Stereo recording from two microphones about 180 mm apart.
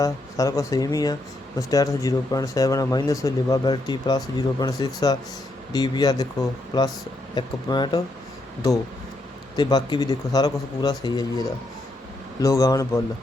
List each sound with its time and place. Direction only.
0.0 s speech: 20° left (ahead or behind)
9.6 s speech: 25° left (ahead or behind)